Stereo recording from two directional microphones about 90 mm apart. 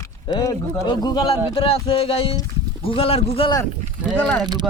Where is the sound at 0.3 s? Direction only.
50° left (ahead or behind).